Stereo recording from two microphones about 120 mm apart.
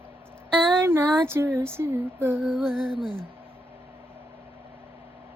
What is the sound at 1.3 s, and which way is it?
Speech, 20° right (ahead or behind).